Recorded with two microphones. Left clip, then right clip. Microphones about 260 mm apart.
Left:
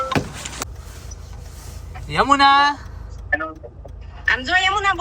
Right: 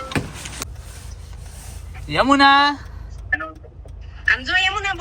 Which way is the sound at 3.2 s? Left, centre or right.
Centre.